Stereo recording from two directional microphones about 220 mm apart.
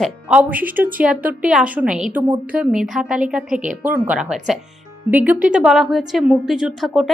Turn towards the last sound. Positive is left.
turn(degrees=0)  # may be behind; listen again after turning